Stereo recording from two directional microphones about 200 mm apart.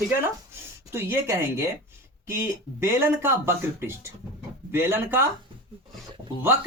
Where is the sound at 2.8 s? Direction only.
15° right (ahead or behind).